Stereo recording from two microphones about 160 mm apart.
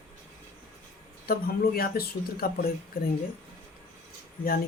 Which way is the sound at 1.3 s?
65° left (ahead or behind).